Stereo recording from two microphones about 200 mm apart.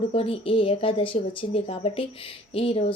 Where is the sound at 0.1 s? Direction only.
30° left (ahead or behind).